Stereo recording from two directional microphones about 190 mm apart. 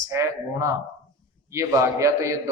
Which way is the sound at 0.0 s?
15° right (ahead or behind).